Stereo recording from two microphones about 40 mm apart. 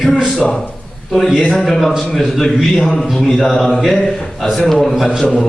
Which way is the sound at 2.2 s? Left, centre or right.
Centre.